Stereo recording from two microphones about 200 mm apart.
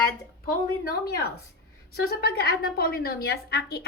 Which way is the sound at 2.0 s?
50° left (ahead or behind).